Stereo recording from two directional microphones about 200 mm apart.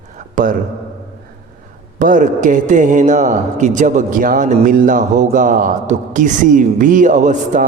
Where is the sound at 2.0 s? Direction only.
40° right (ahead or behind).